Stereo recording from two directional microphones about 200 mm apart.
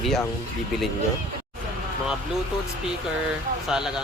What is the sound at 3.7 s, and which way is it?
Speech, 5° right (ahead or behind).